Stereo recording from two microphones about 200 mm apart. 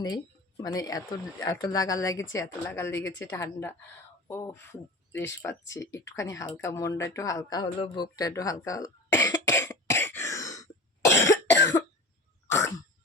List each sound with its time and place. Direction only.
0.0 s a woman's voice: 20° left (ahead or behind)
11.2 s cough: 15° left (ahead or behind)
12.5 s throat clearing: 15° left (ahead or behind)